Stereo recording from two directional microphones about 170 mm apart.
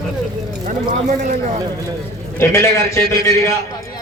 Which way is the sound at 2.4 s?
15° left (ahead or behind).